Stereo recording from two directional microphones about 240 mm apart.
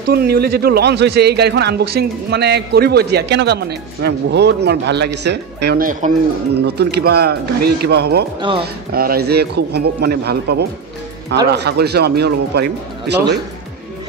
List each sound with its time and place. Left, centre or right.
0.1 s a man's voice: right
8.4 s speech: right
8.9 s a man's voice: right